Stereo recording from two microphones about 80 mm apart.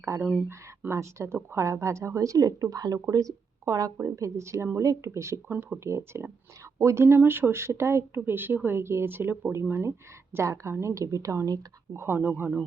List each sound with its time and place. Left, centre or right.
0.2 s speech: centre
0.4 s a woman's voice: right
11.9 s speech: right